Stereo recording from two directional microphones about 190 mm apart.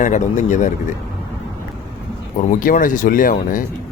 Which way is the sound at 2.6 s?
45° left (ahead or behind).